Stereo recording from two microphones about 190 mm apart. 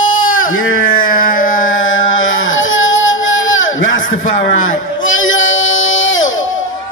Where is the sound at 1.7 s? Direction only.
90° left.